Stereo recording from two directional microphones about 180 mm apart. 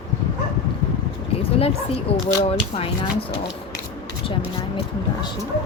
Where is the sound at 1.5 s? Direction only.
35° left (ahead or behind).